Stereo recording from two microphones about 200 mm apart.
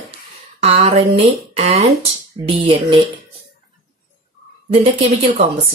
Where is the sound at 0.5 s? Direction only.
30° right (ahead or behind).